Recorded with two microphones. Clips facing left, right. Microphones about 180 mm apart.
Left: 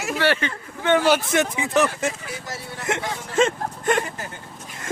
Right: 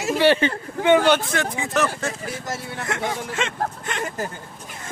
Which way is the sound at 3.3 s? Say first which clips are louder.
Left 5 dB; 45° left (ahead or behind).